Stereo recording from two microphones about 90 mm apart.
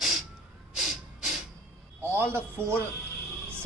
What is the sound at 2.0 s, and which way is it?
Speech, 25° right (ahead or behind).